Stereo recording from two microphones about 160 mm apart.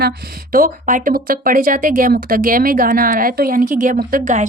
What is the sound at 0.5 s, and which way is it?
Speech, 60° right (ahead or behind).